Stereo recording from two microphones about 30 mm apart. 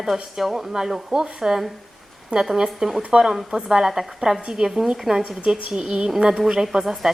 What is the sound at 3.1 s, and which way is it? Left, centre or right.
Speech, right.